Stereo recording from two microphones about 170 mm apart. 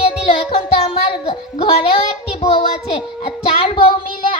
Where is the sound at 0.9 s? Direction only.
35° left (ahead or behind).